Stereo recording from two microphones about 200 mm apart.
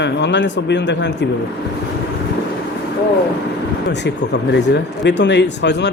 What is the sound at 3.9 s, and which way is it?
Speech, 60° left (ahead or behind).